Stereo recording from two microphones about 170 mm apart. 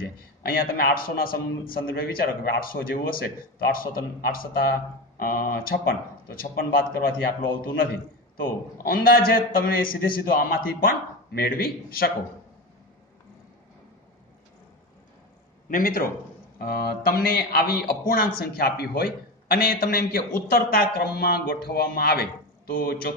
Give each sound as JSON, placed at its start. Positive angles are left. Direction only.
{"t": 0.4, "sound": "a man's voice", "side_deg": 60}
{"t": 15.7, "sound": "a man's voice", "side_deg": 55}